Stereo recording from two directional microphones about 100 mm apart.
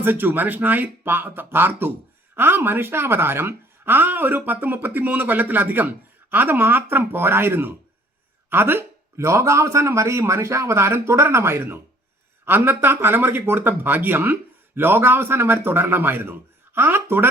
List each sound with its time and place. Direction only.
0.0 s speech: 20° right (ahead or behind)